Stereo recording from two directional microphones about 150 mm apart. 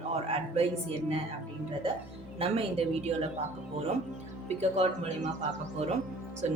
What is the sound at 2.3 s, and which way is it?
Speech, 40° right (ahead or behind).